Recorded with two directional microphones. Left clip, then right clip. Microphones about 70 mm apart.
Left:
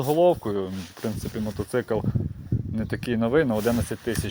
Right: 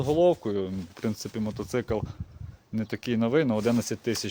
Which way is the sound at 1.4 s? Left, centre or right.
Right.